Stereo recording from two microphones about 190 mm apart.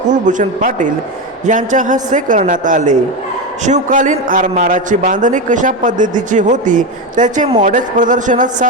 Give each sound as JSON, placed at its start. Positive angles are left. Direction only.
{"t": 0.1, "sound": "a man's voice", "side_deg": -40}